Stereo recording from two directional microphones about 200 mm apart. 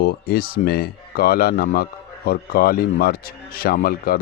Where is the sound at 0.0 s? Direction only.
50° left (ahead or behind).